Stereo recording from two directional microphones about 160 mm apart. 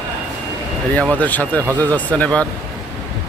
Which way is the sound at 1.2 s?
10° left (ahead or behind).